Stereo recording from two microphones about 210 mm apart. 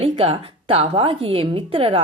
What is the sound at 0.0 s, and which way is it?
A woman's voice, 30° right (ahead or behind).